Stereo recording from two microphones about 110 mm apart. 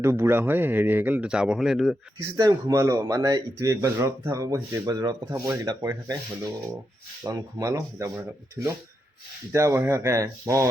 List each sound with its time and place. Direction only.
0.0 s speech: 25° right (ahead or behind); by 2.0 s 5° right (ahead or behind)
2.3 s a man's voice: 30° right (ahead or behind)